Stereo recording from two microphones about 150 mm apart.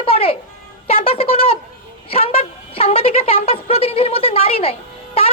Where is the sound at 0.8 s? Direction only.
40° left (ahead or behind).